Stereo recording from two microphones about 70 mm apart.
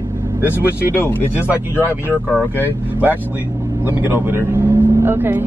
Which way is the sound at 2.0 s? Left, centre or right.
Right.